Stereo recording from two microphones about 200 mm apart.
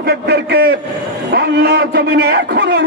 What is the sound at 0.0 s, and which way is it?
A man's voice, 55° right (ahead or behind).